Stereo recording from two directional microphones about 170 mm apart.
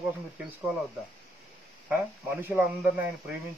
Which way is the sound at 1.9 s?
10° right (ahead or behind).